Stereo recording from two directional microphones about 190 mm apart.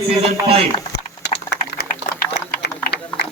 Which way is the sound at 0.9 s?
60° left (ahead or behind).